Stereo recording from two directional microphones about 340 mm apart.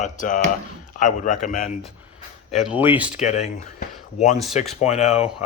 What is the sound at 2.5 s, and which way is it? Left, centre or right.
Speech, centre.